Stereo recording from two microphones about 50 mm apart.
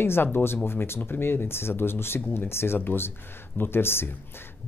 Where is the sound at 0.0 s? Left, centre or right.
Left.